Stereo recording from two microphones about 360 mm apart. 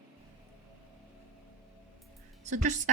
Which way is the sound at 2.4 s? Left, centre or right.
Centre.